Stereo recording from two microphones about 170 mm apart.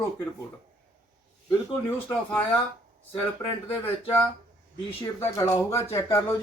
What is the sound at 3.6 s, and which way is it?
Speech, 10° left (ahead or behind).